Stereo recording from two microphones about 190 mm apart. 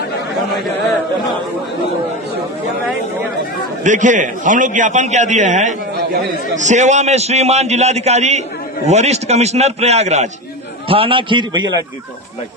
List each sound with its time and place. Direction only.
3.8 s a man's voice: 40° right (ahead or behind); by 11.6 s 25° right (ahead or behind)